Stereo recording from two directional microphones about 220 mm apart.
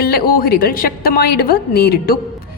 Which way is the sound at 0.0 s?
45° left (ahead or behind).